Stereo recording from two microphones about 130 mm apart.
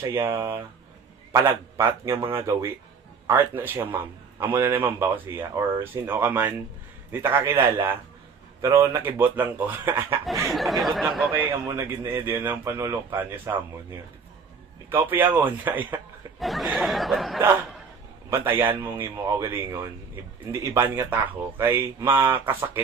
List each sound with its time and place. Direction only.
0.0 s a man's voice: 15° right (ahead or behind)
10.5 s speech: centre (ahead or behind)
11.3 s a man's voice: 15° right (ahead or behind)
14.8 s a man's voice: 15° right (ahead or behind)
16.4 s speech: centre (ahead or behind)
18.3 s a man's voice: 15° right (ahead or behind)